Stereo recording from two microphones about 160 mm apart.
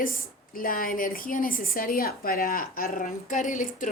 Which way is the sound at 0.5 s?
60° left (ahead or behind).